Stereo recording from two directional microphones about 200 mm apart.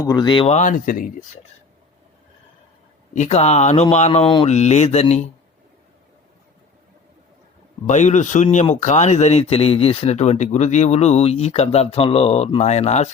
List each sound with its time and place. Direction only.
0.0 s speech: 20° left (ahead or behind); by 1.4 s 40° left (ahead or behind)
3.1 s speech: 35° left (ahead or behind)
7.9 s speech: 35° left (ahead or behind)